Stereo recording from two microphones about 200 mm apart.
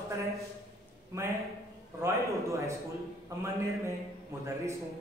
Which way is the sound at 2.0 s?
15° right (ahead or behind).